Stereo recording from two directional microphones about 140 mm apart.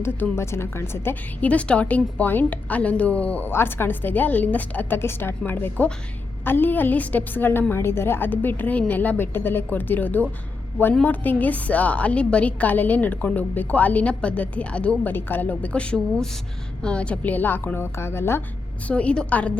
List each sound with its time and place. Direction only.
0.0 s a woman's voice: 20° left (ahead or behind)